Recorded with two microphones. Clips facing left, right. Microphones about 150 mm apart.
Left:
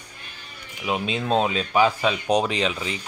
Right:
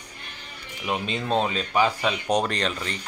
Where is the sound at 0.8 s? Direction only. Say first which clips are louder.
Left 2 dB; 5° left (ahead or behind).